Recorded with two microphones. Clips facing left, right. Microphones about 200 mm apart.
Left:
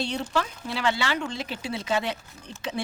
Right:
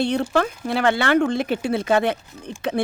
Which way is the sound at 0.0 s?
55° right (ahead or behind).